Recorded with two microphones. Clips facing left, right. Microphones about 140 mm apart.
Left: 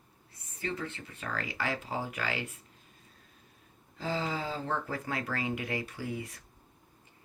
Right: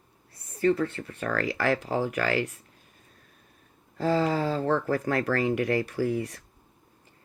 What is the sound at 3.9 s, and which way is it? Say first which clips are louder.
Speech: right 9 dB; 55° right (ahead or behind).